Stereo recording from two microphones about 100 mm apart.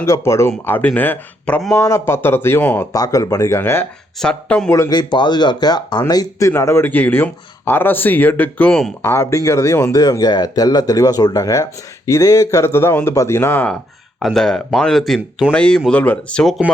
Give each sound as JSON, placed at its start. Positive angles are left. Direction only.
{"t": 0.0, "sound": "speech", "side_deg": 30}
{"t": 1.7, "sound": "speech", "side_deg": 30}
{"t": 2.9, "sound": "speech", "side_deg": 35}
{"t": 3.6, "sound": "speech", "side_deg": 20}
{"t": 4.2, "sound": "speech", "side_deg": 10}
{"t": 4.9, "sound": "speech", "side_deg": 45}
{"t": 6.5, "sound": "speech", "side_deg": 25}
{"t": 9.0, "sound": "speech", "side_deg": 30}
{"t": 14.2, "sound": "speech", "side_deg": 0}